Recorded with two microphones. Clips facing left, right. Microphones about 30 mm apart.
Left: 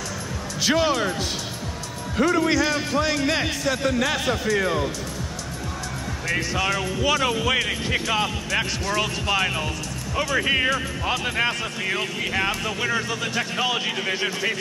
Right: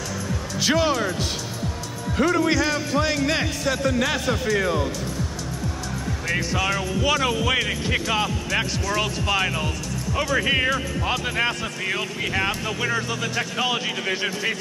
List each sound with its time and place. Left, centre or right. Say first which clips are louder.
0.7 s speech: even; centre
2.1 s speech: even; centre
6.2 s speech: even; centre